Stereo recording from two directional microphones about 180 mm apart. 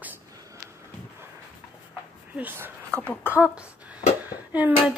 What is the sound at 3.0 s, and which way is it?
Speech, 10° left (ahead or behind).